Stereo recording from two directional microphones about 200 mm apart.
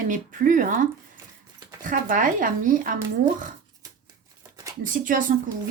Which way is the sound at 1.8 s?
45° right (ahead or behind).